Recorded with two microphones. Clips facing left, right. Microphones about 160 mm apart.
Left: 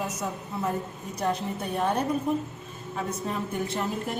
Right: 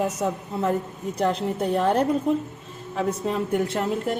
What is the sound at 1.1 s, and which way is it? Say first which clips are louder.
A woman's voice: right 5 dB; 90° right.